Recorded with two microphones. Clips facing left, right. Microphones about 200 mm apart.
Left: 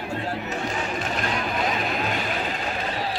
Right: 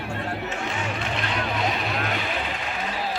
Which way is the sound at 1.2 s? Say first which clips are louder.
Even; 45° left (ahead or behind).